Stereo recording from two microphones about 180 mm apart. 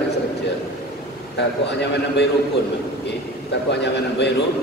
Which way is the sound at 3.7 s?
75° left (ahead or behind).